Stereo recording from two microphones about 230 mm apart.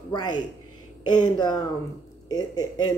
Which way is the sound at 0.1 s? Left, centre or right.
Centre.